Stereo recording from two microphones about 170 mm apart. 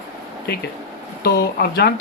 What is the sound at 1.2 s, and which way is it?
Speech, 65° left (ahead or behind).